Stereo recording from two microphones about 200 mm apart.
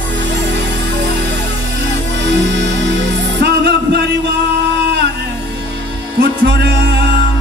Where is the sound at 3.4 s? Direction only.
55° right (ahead or behind).